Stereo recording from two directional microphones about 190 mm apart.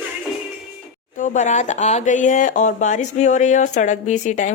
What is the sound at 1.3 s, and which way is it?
Speech, 40° left (ahead or behind).